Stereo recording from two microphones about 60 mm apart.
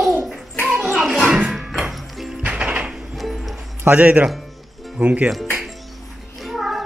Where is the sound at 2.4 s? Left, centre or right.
Centre.